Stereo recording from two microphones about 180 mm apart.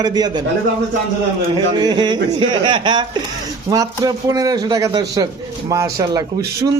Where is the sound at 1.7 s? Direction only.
25° right (ahead or behind).